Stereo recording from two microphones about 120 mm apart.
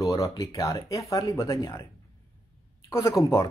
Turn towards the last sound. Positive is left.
turn(degrees=25)  # may be behind; listen again after turning